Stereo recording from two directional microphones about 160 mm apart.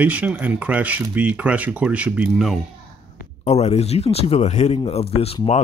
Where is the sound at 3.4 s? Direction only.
40° left (ahead or behind).